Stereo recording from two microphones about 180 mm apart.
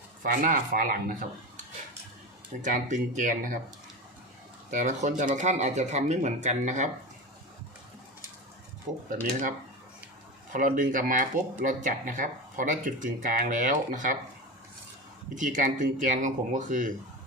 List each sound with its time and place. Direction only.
0.2 s speech: 50° right (ahead or behind)
2.6 s speech: 45° right (ahead or behind)
4.7 s speech: 45° right (ahead or behind)
10.5 s speech: 45° right (ahead or behind)
15.4 s speech: 45° right (ahead or behind)